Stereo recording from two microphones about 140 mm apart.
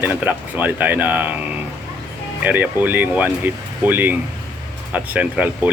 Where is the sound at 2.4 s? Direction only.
10° right (ahead or behind).